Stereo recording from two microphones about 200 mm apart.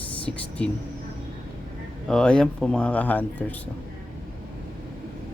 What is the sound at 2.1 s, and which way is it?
Speech, 5° left (ahead or behind).